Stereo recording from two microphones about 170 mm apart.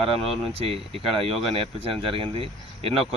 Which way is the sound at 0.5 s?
35° right (ahead or behind).